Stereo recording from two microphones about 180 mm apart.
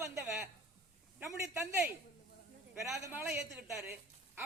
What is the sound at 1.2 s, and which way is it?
Speech, 15° right (ahead or behind).